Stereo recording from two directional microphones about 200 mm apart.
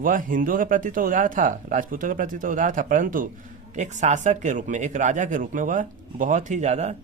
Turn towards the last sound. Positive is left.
turn(degrees=-35)  # may be behind; listen again after turning